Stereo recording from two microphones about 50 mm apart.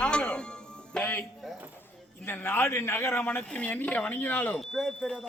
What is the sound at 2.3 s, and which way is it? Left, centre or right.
Speech, left.